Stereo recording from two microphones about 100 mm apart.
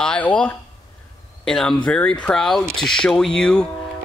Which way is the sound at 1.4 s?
5° left (ahead or behind).